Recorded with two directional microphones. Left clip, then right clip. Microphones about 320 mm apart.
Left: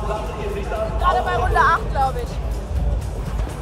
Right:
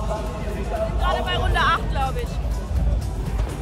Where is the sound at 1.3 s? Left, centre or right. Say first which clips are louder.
Left 1 dB; centre.